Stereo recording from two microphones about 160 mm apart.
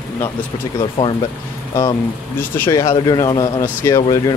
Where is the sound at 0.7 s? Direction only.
30° left (ahead or behind).